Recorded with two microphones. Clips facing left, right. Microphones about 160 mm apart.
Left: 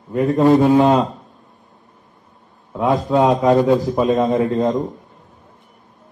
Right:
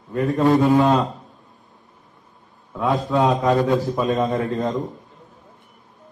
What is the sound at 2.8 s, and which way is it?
A man's voice, 20° left (ahead or behind).